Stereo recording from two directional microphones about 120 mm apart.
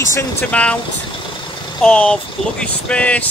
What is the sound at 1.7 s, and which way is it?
Speech, 10° left (ahead or behind).